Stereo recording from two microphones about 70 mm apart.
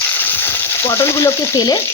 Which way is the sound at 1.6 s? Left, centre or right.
Left.